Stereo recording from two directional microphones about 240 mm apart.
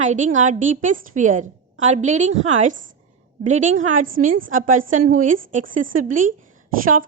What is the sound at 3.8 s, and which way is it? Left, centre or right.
A woman's voice, right.